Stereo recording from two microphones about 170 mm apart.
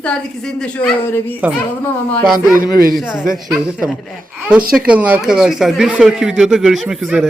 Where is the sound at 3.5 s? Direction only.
5° right (ahead or behind).